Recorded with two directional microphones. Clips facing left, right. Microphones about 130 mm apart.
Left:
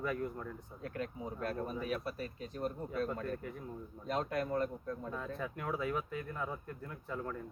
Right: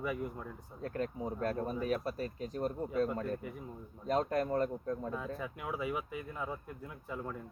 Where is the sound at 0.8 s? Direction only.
35° right (ahead or behind).